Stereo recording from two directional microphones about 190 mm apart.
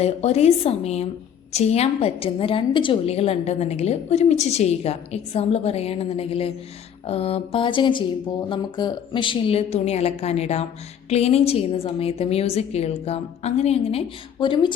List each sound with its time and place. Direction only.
0.0 s a woman's voice: 35° left (ahead or behind)